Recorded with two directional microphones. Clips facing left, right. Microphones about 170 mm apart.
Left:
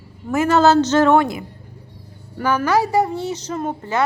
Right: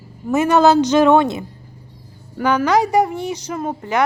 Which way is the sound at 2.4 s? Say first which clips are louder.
Right 2 dB; 15° right (ahead or behind).